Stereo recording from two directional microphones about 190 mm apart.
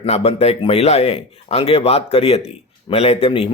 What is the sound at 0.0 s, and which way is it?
A man's voice, 30° left (ahead or behind).